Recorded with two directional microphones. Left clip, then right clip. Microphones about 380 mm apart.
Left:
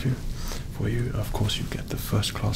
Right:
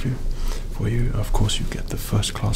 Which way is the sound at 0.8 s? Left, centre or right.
Right.